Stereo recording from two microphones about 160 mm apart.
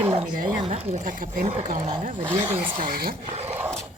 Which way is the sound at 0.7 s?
40° right (ahead or behind).